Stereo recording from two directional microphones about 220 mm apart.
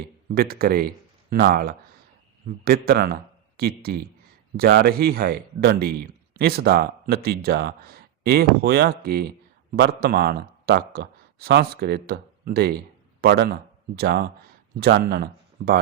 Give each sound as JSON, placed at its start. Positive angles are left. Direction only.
{"t": 0.3, "sound": "speech", "side_deg": -45}